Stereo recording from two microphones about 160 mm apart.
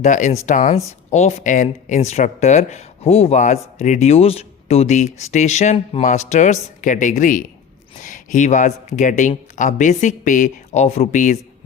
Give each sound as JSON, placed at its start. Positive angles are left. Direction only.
{"t": 0.0, "sound": "speech", "side_deg": 50}